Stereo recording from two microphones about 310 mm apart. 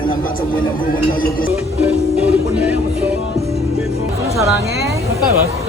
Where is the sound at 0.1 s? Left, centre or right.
Left.